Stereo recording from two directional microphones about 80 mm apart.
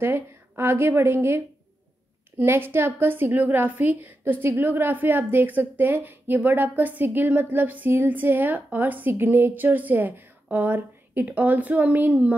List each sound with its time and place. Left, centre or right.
0.0 s a woman's voice: right